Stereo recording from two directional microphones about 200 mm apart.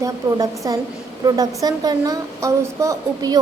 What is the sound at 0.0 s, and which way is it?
A woman's voice, 15° right (ahead or behind).